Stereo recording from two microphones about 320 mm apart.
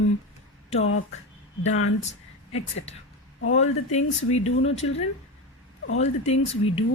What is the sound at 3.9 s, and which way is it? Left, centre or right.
Speech, centre.